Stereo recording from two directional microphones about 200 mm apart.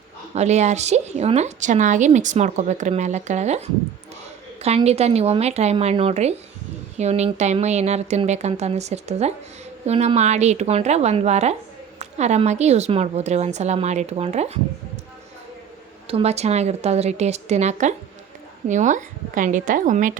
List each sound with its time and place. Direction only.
0.3 s a woman's voice: 35° right (ahead or behind)
4.6 s a woman's voice: 30° right (ahead or behind)
16.0 s a woman's voice: 30° right (ahead or behind)